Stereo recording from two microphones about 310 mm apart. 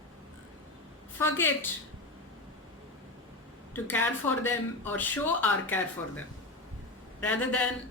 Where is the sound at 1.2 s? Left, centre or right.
Centre.